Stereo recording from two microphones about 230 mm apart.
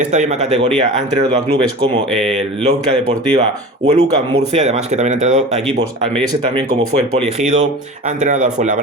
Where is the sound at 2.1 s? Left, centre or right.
Centre.